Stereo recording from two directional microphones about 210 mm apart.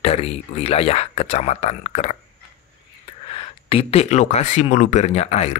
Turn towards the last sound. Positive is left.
turn(degrees=30)  # may be behind; listen again after turning